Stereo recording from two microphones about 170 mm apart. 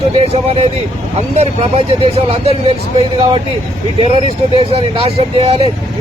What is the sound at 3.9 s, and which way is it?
Speech, 30° right (ahead or behind).